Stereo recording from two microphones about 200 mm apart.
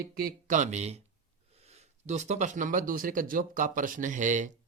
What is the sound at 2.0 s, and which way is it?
Speech, 35° right (ahead or behind).